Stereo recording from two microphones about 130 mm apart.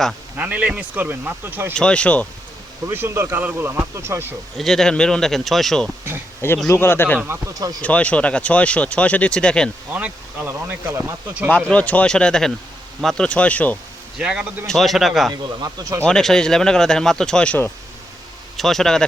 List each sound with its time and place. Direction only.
0.3 s speech: 10° right (ahead or behind)
1.7 s speech: 5° left (ahead or behind)
2.8 s speech: 20° right (ahead or behind)
4.5 s speech: centre (ahead or behind)
6.7 s speech: 20° left (ahead or behind)
7.2 s speech: 20° right (ahead or behind)
7.8 s speech: 10° left (ahead or behind)
9.9 s speech: 15° right (ahead or behind)
11.7 s speech: 10° left (ahead or behind)
14.2 s speech: 5° right (ahead or behind)
15.3 s speech: 30° right (ahead or behind)
16.0 s speech: 5° left (ahead or behind)